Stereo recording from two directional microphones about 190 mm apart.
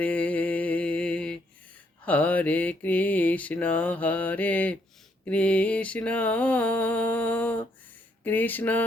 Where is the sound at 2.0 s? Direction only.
5° left (ahead or behind).